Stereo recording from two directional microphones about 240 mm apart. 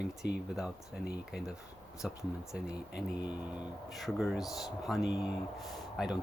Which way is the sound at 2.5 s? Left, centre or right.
Centre.